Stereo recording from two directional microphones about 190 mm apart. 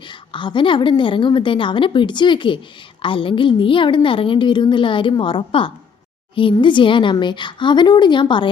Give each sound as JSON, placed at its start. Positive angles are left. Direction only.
{"t": 0.1, "sound": "a woman's voice", "side_deg": 25}